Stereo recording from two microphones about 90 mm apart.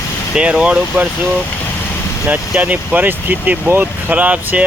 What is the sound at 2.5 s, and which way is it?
Speech, 15° right (ahead or behind).